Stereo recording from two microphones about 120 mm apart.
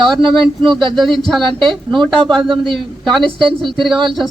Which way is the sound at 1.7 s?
40° right (ahead or behind).